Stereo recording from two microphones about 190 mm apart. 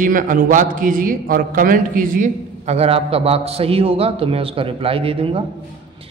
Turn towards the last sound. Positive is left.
turn(degrees=-30)  # may be behind; listen again after turning